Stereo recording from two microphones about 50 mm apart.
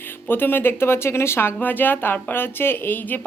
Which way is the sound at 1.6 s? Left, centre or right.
Left.